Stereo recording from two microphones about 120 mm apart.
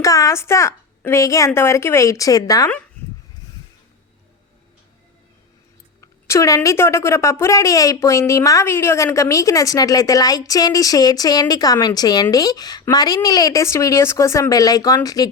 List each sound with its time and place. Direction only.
0.0 s a woman's voice: 30° left (ahead or behind)
6.0 s a woman's voice: 25° left (ahead or behind)